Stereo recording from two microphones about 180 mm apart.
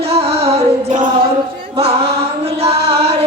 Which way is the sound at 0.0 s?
35° right (ahead or behind).